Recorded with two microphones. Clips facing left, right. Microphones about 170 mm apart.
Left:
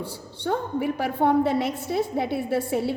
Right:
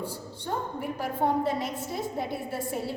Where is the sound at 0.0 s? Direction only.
75° left (ahead or behind).